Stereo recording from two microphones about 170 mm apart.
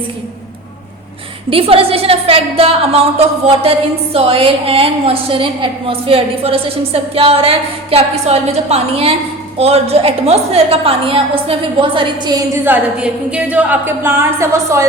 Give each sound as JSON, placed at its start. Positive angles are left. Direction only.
{"t": 1.5, "sound": "a woman's voice", "side_deg": -35}
{"t": 12.6, "sound": "a woman's voice", "side_deg": -10}